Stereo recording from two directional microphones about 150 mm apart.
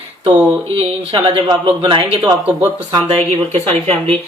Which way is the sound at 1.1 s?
35° right (ahead or behind).